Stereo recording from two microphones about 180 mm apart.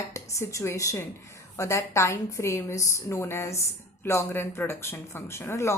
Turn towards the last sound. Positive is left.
turn(degrees=15)  # may be behind; listen again after turning